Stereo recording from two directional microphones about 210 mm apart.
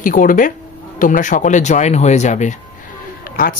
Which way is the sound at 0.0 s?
40° left (ahead or behind).